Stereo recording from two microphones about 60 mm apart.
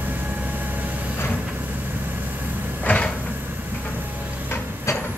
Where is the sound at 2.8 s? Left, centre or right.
Centre.